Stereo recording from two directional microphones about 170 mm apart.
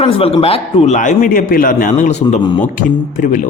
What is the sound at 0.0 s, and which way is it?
Speech, 35° left (ahead or behind).